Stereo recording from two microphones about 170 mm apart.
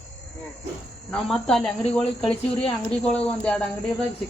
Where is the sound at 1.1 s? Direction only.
Centre (ahead or behind).